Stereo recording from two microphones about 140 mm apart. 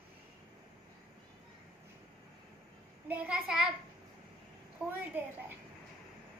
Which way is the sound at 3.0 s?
10° right (ahead or behind).